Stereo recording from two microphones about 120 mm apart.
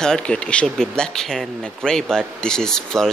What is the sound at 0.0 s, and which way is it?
Speech, 5° left (ahead or behind).